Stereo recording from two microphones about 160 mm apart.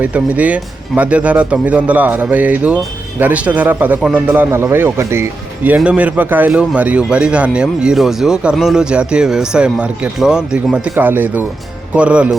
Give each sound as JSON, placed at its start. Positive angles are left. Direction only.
{"t": 0.0, "sound": "speech", "side_deg": -10}